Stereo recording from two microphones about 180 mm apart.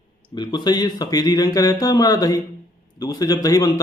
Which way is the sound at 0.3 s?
25° left (ahead or behind).